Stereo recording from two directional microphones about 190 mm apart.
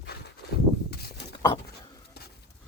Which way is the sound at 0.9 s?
55° left (ahead or behind).